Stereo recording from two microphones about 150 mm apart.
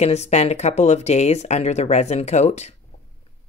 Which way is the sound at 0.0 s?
45° left (ahead or behind).